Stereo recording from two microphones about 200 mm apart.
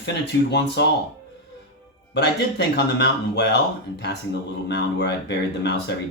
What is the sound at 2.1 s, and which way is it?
Speech, 55° left (ahead or behind).